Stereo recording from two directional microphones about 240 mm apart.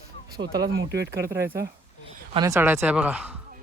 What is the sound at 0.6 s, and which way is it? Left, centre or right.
Speech, right.